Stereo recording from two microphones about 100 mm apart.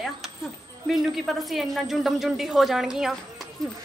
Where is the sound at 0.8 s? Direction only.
Centre (ahead or behind).